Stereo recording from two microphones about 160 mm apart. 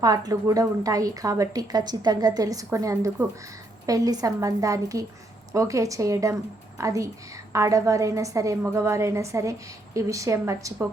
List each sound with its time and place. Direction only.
0.0 s a woman's voice: 25° right (ahead or behind)